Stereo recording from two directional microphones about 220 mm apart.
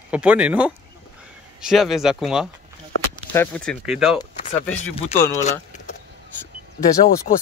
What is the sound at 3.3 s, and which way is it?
Speech, 10° left (ahead or behind).